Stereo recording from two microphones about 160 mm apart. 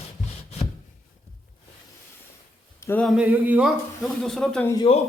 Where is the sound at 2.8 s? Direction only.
10° left (ahead or behind).